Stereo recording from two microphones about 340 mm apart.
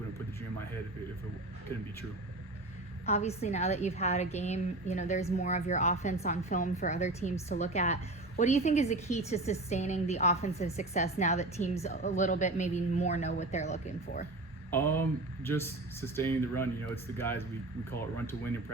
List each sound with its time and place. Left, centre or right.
3.1 s a woman's voice: centre
14.7 s speech: centre